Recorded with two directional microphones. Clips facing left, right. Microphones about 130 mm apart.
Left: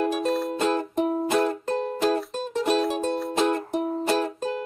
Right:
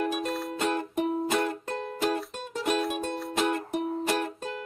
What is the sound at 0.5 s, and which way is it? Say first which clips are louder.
Music: left 5 dB; 30° left (ahead or behind).